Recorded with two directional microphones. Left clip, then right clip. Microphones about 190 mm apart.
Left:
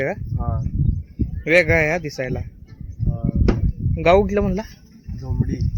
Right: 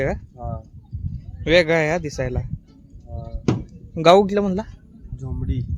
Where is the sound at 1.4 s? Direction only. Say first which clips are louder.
Left 1 dB; 10° right (ahead or behind).